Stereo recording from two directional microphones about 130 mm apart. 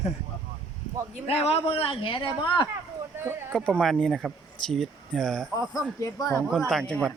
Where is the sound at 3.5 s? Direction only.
5° left (ahead or behind).